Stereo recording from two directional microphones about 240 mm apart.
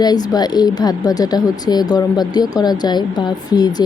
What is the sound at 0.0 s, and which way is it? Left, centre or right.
Speech, centre.